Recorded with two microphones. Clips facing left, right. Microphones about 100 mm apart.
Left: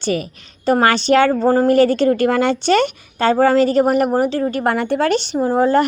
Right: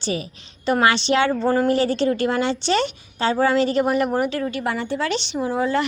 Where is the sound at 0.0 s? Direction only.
55° left (ahead or behind); by 1.7 s 40° left (ahead or behind).